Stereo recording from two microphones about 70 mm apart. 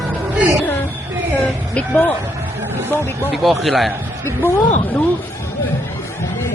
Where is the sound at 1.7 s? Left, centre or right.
Centre.